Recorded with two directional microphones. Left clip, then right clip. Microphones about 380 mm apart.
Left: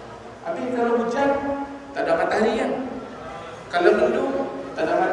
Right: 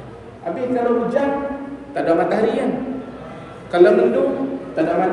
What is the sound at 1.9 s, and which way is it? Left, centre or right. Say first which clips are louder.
Speech: right 4 dB; centre.